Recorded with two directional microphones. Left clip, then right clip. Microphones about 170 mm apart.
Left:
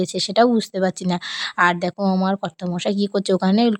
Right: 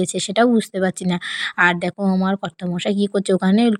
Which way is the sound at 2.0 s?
5° right (ahead or behind).